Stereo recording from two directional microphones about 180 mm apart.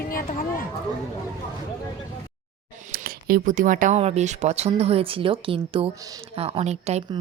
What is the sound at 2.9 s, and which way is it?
Speech, 55° right (ahead or behind).